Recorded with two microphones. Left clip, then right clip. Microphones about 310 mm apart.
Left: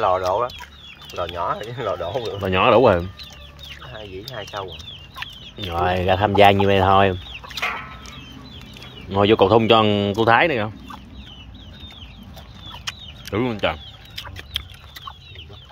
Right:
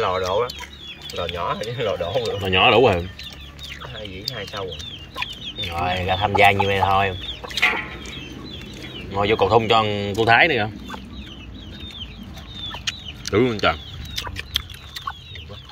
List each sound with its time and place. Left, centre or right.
0.0 s speech: centre
9.1 s speech: left; by 10.7 s centre
12.8 s chicken: centre